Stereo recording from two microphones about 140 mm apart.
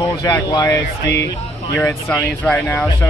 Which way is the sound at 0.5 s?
25° left (ahead or behind).